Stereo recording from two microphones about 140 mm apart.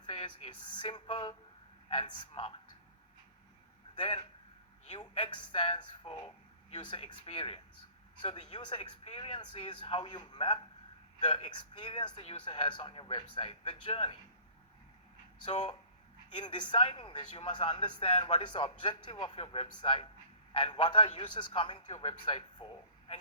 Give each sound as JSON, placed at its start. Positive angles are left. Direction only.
{"t": 0.0, "sound": "speech", "side_deg": 40}
{"t": 3.9, "sound": "a man's voice", "side_deg": 40}
{"t": 16.4, "sound": "speech", "side_deg": 40}